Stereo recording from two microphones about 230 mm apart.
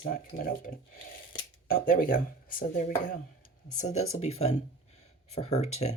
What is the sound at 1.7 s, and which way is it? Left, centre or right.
Speech, left.